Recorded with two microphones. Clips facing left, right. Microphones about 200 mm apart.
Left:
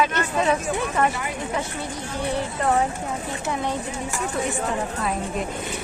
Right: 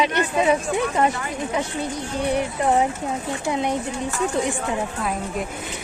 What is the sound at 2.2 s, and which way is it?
A woman's voice, 15° right (ahead or behind).